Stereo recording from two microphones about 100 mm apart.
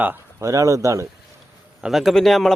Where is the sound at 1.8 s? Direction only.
Centre (ahead or behind).